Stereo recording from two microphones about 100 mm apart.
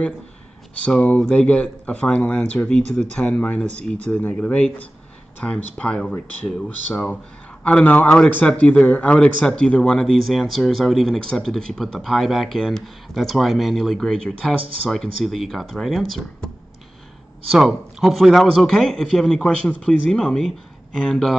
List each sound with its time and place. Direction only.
0.8 s a man's voice: 10° left (ahead or behind)
7.6 s speech: 15° left (ahead or behind)
17.5 s speech: 5° right (ahead or behind)